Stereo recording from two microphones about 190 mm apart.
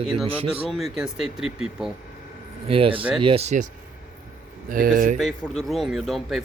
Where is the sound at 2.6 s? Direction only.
30° right (ahead or behind).